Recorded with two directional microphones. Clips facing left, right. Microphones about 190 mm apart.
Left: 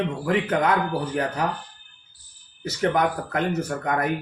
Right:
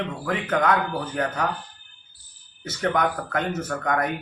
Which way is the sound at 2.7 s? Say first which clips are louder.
Left 2 dB; 30° left (ahead or behind).